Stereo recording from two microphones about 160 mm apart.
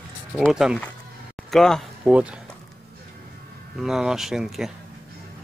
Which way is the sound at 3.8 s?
5° right (ahead or behind).